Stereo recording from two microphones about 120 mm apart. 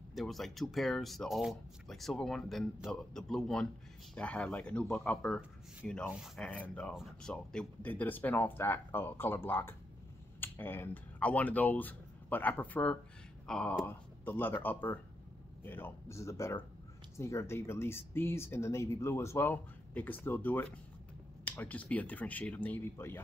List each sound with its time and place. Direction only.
0.1 s speech: centre (ahead or behind)
6.4 s speech: 10° left (ahead or behind)